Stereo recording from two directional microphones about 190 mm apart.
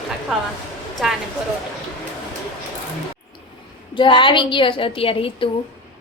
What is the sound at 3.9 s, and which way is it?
A woman's voice, 25° left (ahead or behind).